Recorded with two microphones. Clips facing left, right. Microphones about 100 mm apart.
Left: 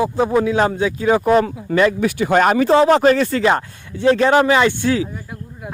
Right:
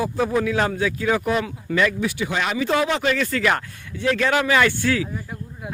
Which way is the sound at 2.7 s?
35° left (ahead or behind).